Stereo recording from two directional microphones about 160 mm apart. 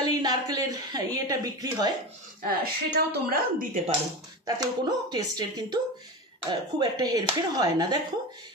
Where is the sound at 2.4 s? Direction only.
70° right (ahead or behind).